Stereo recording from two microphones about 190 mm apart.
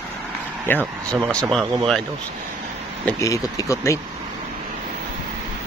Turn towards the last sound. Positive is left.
turn(degrees=15)  # may be behind; listen again after turning